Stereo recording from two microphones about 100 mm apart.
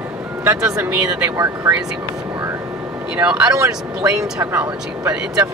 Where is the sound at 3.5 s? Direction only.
30° right (ahead or behind).